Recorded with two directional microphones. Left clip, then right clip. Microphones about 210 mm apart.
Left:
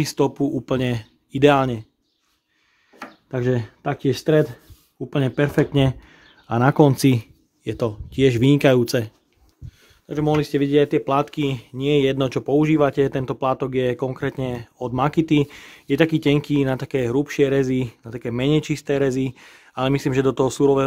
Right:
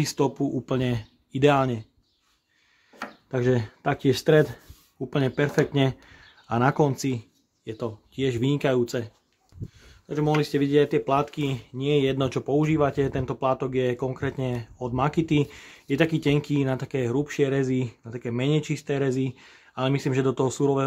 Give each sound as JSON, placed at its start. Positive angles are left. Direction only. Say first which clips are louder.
{"t": 0.0, "sound": "speech", "louder": "left 4 dB", "side_deg": 40}
{"t": 3.3, "sound": "speech", "louder": "left 1 dB", "side_deg": 20}
{"t": 5.1, "sound": "speech", "louder": "left 3 dB", "side_deg": 20}
{"t": 7.0, "sound": "speech", "louder": "left 10 dB", "side_deg": 40}